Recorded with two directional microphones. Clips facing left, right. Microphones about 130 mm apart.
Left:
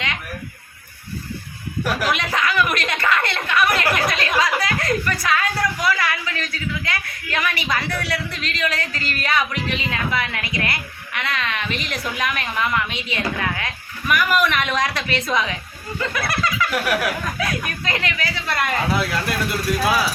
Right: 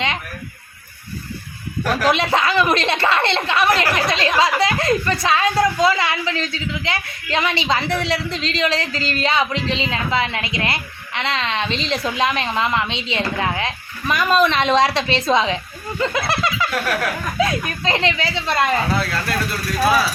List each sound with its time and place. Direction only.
2.0 s speech: 30° right (ahead or behind)
16.7 s speech: 10° left (ahead or behind)
17.3 s speech: 25° right (ahead or behind)
18.9 s speech: 15° left (ahead or behind)